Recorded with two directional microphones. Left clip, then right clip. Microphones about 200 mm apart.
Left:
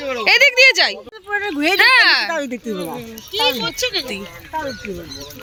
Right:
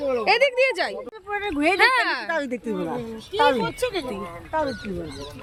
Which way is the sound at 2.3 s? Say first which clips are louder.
Left 3 dB; 45° left (ahead or behind).